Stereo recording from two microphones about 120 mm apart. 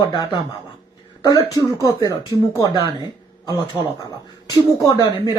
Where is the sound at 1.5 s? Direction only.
30° left (ahead or behind).